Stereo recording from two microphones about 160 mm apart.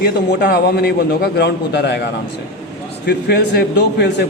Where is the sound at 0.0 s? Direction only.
65° left (ahead or behind); by 2.0 s 90° left.